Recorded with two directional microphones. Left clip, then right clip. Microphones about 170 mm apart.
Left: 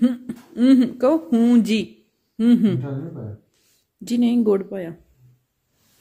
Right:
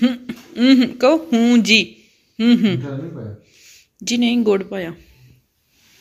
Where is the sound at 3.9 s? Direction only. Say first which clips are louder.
Right 2 dB; 25° left (ahead or behind).